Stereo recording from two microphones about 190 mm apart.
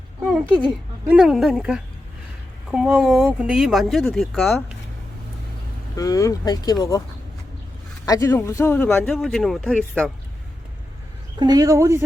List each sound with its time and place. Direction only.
0.3 s speech: 5° right (ahead or behind)
6.0 s speech: 20° left (ahead or behind)
8.0 s speech: 15° left (ahead or behind)
11.3 s speech: 20° right (ahead or behind)